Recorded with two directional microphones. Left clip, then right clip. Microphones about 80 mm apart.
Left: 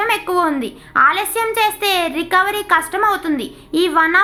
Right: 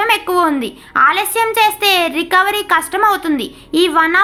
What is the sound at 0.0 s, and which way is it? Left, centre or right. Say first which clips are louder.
A child's voice: right 3 dB; right.